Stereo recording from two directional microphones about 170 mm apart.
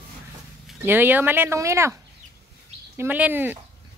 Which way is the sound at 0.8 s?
10° right (ahead or behind).